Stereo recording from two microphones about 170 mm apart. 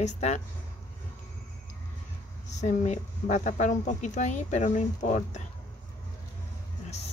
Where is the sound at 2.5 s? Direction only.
45° left (ahead or behind).